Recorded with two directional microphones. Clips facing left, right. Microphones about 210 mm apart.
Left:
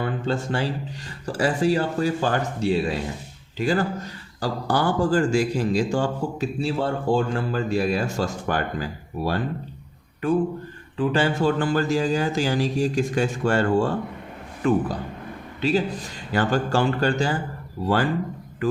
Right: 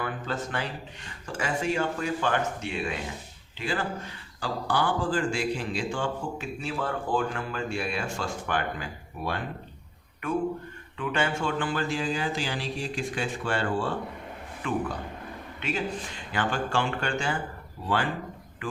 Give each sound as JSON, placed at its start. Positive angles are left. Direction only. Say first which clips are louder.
{"t": 0.0, "sound": "speech", "louder": "left 6 dB", "side_deg": 30}